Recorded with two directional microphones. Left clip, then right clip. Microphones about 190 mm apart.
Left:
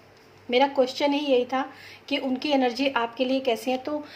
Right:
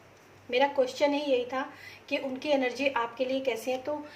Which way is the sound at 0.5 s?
50° left (ahead or behind).